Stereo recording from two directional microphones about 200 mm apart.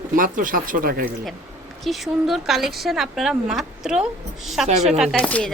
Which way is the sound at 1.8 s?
Centre (ahead or behind).